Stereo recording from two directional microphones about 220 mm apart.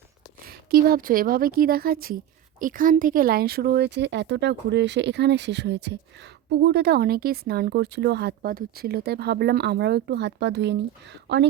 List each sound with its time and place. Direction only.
0.4 s speech: 40° right (ahead or behind)